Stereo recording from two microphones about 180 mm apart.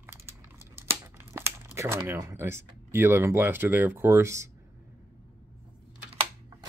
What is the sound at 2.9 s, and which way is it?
Speech, 15° right (ahead or behind).